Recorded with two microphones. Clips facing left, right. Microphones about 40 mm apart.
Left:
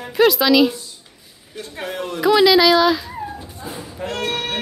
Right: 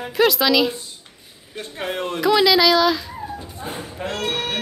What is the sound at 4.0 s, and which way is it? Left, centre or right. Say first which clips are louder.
Speech: left 2 dB; right.